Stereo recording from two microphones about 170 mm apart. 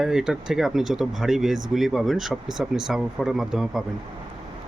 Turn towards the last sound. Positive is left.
turn(degrees=0)  # may be behind; listen again after turning